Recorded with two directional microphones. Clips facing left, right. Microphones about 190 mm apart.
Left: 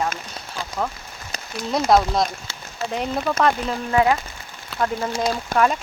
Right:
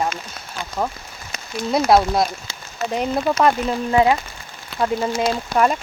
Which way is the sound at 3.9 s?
20° right (ahead or behind).